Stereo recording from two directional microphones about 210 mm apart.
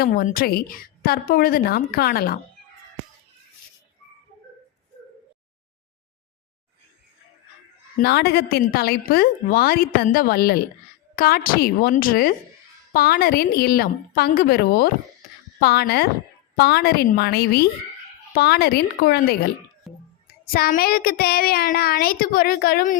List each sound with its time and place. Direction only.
0.0 s a woman's voice: 40° left (ahead or behind)
7.9 s a woman's voice: 50° left (ahead or behind)
20.5 s a woman's voice: 45° left (ahead or behind)